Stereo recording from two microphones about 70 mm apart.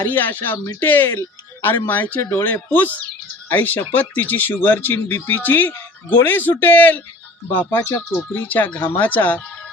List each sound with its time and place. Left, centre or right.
0.0 s speech: left
7.8 s speech: left
8.4 s speech: left